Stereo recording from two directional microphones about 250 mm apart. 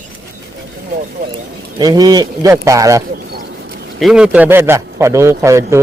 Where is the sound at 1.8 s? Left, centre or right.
Centre.